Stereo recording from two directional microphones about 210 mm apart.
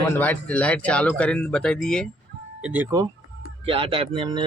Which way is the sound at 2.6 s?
10° right (ahead or behind).